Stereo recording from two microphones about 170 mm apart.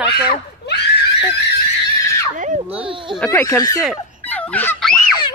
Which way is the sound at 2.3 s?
45° right (ahead or behind).